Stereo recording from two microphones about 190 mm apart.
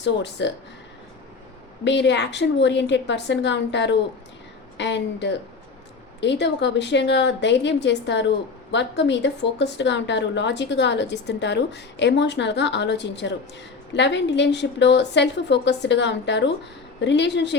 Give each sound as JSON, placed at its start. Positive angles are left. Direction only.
{"t": 0.0, "sound": "a woman's voice", "side_deg": 65}
{"t": 1.8, "sound": "a woman's voice", "side_deg": 65}